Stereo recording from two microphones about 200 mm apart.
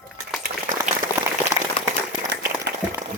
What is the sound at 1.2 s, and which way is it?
Applause, 15° right (ahead or behind).